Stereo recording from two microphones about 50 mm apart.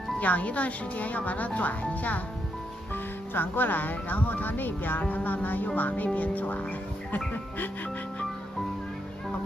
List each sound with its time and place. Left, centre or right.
0.2 s speech: left